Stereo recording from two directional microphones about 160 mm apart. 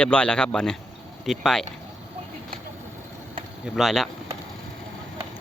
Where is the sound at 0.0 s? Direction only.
5° left (ahead or behind).